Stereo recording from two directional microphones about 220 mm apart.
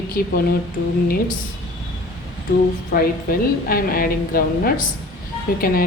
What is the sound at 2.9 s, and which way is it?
A woman's voice, 40° left (ahead or behind).